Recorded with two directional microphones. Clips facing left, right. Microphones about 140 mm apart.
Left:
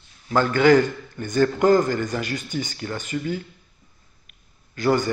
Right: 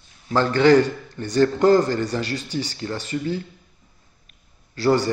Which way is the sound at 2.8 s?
30° right (ahead or behind).